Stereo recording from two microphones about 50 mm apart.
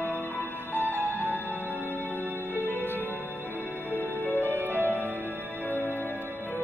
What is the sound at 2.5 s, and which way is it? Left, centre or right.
Music, left.